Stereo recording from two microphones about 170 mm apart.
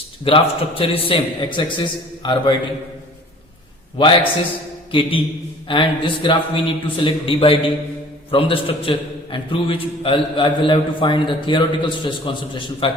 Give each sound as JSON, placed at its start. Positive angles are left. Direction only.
{"t": 0.3, "sound": "a man's voice", "side_deg": 30}
{"t": 3.9, "sound": "a man's voice", "side_deg": 30}